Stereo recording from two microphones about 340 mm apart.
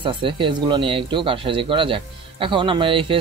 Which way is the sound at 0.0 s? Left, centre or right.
Centre.